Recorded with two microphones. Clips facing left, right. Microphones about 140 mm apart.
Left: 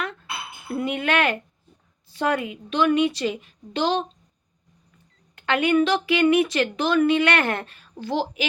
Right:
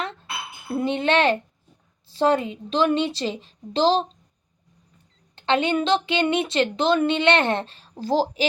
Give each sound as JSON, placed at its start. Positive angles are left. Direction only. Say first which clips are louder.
{"t": 0.8, "sound": "a woman's voice", "louder": "right 3 dB", "side_deg": -30}
{"t": 5.3, "sound": "a woman's voice", "louder": "left 1 dB", "side_deg": -25}